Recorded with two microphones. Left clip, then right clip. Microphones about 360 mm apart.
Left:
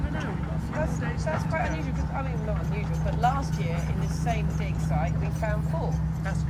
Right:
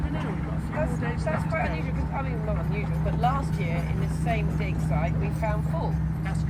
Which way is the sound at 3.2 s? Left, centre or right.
Right.